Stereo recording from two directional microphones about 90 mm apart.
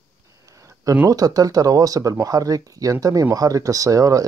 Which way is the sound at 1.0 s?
45° right (ahead or behind).